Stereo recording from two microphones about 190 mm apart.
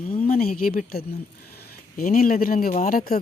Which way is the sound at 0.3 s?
50° left (ahead or behind).